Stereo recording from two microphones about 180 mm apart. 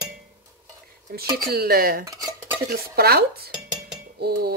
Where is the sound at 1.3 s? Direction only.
55° right (ahead or behind).